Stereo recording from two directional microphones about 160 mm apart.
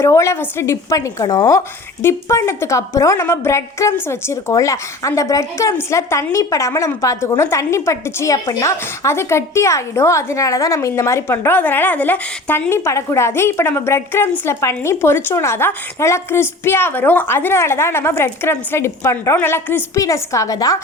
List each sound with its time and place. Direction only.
0.0 s a woman's voice: 20° left (ahead or behind)